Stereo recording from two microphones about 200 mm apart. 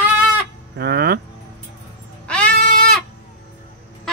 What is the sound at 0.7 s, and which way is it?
Speech, 55° right (ahead or behind).